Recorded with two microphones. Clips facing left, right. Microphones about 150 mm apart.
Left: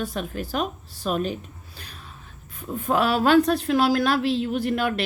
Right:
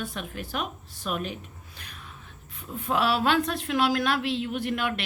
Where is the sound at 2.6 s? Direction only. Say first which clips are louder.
Left 4 dB; 45° left (ahead or behind).